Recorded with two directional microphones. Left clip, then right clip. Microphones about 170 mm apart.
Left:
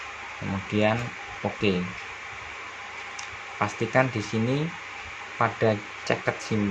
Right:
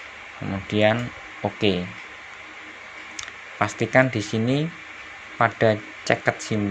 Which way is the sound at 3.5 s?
30° right (ahead or behind).